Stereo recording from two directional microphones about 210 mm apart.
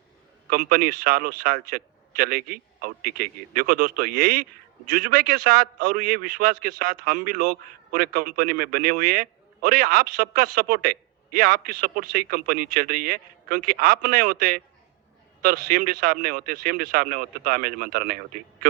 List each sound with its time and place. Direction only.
0.5 s a man's voice: 45° right (ahead or behind)